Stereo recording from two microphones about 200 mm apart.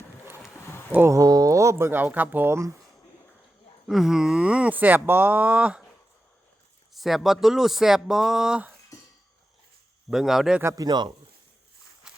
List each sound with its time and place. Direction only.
0.3 s horse: 15° left (ahead or behind)
0.9 s speech: 15° right (ahead or behind)
3.8 s speech: centre (ahead or behind)
6.9 s speech: centre (ahead or behind)
10.1 s speech: centre (ahead or behind)
10.6 s speech: 15° right (ahead or behind)
12.0 s walk: 5° right (ahead or behind)